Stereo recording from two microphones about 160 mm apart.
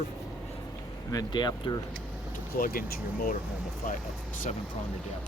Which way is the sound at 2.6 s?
65° left (ahead or behind).